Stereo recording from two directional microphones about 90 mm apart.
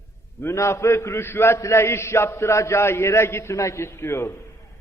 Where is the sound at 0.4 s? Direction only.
30° left (ahead or behind).